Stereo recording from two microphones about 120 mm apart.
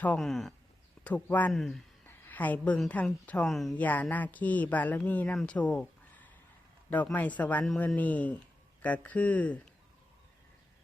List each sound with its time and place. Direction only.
0.2 s speech: centre (ahead or behind)
1.0 s speech: 15° left (ahead or behind)
1.5 s speech: centre (ahead or behind)
2.0 s a sound: 15° left (ahead or behind)
2.9 s speech: 10° left (ahead or behind)
3.4 s speech: centre (ahead or behind)
3.8 s speech: 15° left (ahead or behind)
5.4 s a sound: 10° left (ahead or behind)
6.9 s speech: 15° left (ahead or behind)